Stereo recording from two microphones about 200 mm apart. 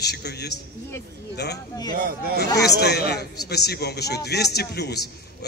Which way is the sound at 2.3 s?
55° left (ahead or behind).